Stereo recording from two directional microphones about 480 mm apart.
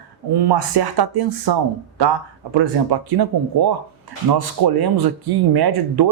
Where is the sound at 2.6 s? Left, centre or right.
Right.